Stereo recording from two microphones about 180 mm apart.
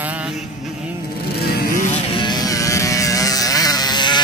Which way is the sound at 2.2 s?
25° left (ahead or behind).